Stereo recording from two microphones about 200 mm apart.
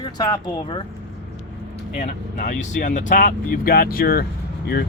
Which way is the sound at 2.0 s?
40° left (ahead or behind).